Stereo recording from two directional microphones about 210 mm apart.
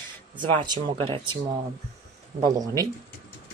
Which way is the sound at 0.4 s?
25° right (ahead or behind).